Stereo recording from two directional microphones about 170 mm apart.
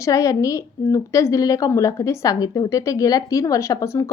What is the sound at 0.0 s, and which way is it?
A woman's voice, 20° left (ahead or behind).